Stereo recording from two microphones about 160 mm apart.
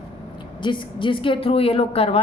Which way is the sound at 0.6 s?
30° left (ahead or behind).